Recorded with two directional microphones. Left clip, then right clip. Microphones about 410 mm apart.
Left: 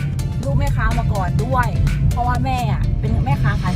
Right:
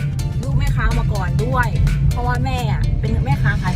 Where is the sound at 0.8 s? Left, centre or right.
Centre.